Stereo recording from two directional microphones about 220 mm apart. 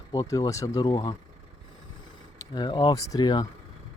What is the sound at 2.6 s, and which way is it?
Speech, 20° left (ahead or behind).